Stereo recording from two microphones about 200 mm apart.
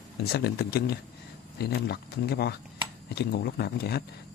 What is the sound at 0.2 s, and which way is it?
Speech, 50° left (ahead or behind).